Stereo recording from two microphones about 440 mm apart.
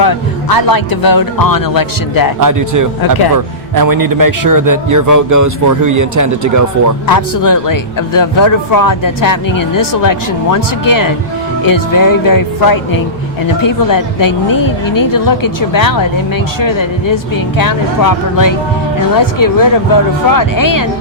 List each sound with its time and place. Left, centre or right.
0.0 s speech: left
2.4 s a man's voice: right
7.1 s speech: left